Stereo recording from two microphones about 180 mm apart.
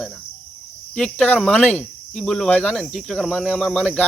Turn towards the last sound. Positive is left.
turn(degrees=0)  # may be behind; listen again after turning